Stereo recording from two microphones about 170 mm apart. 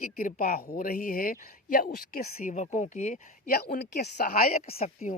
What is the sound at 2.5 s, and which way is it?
Speech, 45° left (ahead or behind).